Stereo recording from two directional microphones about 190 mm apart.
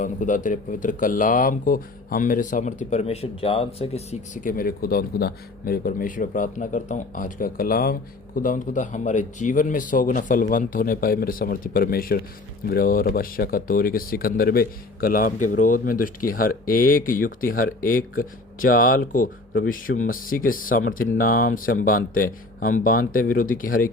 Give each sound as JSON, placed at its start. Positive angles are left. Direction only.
{"t": 0.0, "sound": "speech", "side_deg": 45}